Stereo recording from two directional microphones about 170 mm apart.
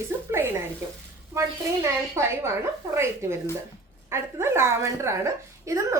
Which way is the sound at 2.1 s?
15° right (ahead or behind).